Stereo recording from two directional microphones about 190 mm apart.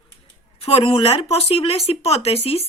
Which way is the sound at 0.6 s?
30° left (ahead or behind).